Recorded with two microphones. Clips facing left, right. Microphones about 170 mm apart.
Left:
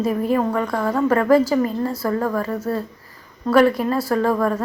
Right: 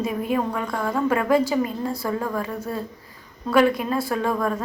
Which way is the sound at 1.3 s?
5° left (ahead or behind).